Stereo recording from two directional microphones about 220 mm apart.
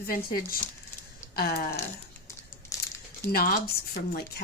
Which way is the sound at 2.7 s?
15° left (ahead or behind).